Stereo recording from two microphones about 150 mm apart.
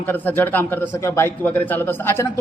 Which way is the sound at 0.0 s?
10° left (ahead or behind).